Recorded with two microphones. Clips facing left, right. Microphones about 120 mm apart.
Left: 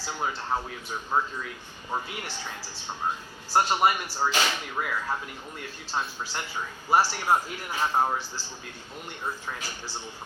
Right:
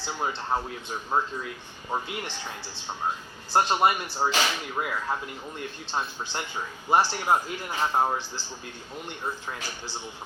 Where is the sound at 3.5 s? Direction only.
25° right (ahead or behind).